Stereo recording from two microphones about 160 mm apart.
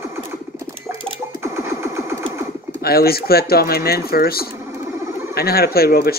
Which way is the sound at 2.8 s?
70° left (ahead or behind).